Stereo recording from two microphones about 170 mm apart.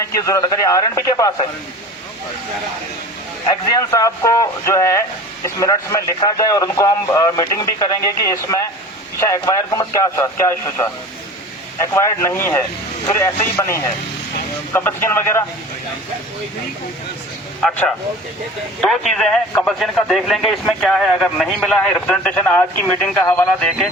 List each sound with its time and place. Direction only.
0.0 s speech: 20° left (ahead or behind)
3.7 s a man's voice: 20° left (ahead or behind)
11.9 s a man's voice: 15° left (ahead or behind)
17.6 s a man's voice: 5° left (ahead or behind)